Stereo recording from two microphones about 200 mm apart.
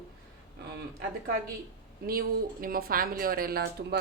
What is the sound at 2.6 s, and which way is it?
A woman's voice, 45° right (ahead or behind).